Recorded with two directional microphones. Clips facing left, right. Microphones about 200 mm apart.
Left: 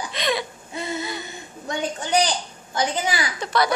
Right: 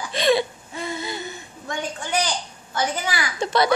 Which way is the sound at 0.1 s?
30° right (ahead or behind).